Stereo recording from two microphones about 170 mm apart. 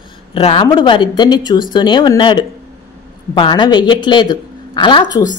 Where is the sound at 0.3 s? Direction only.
30° left (ahead or behind).